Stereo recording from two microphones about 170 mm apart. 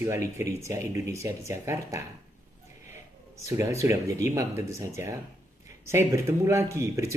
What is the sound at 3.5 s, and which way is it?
Speech, 20° right (ahead or behind).